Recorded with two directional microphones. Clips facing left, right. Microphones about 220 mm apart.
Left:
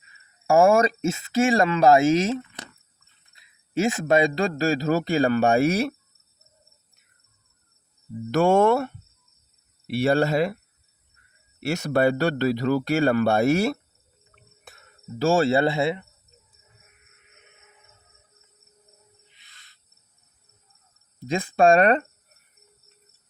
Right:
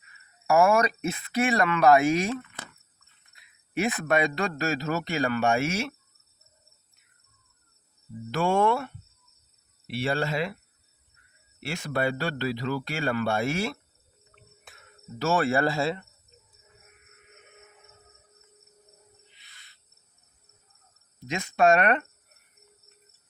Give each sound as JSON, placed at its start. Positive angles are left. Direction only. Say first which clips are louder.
{"t": 0.1, "sound": "a man's voice", "louder": "left 3 dB", "side_deg": 30}
{"t": 8.3, "sound": "speech", "louder": "left 6 dB", "side_deg": 45}
{"t": 10.0, "sound": "a man's voice", "louder": "left 7 dB", "side_deg": 40}
{"t": 11.7, "sound": "a man's voice", "louder": "left 7 dB", "side_deg": 40}
{"t": 15.2, "sound": "speech", "louder": "left 5 dB", "side_deg": 30}
{"t": 21.2, "sound": "a man's voice", "louder": "left 4 dB", "side_deg": 30}